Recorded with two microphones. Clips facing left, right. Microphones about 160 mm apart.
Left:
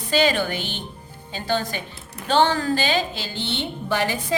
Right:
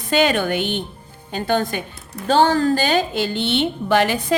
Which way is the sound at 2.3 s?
40° right (ahead or behind).